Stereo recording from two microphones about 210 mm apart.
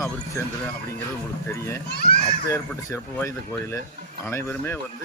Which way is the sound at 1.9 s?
50° left (ahead or behind).